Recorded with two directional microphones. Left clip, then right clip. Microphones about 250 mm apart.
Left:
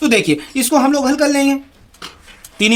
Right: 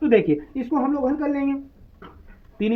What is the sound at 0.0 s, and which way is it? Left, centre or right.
Speech, left.